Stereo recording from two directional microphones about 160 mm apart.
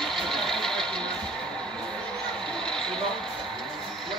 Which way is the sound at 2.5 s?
5° left (ahead or behind).